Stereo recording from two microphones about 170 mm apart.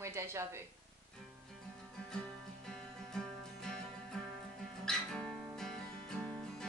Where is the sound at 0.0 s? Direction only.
15° right (ahead or behind).